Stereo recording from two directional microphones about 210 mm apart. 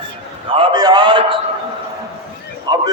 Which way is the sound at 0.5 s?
20° right (ahead or behind).